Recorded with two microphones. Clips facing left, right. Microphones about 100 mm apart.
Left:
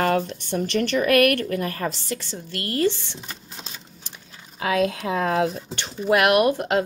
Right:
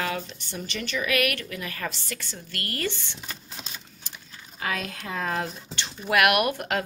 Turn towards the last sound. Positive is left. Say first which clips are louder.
# left 6 dB
turn(degrees=30)  # may be behind; listen again after turning